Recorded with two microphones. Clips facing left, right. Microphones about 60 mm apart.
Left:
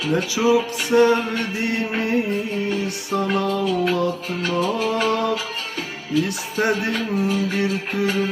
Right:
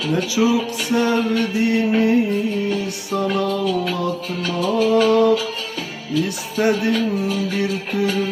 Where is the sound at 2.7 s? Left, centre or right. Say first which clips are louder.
Right 1 dB; left.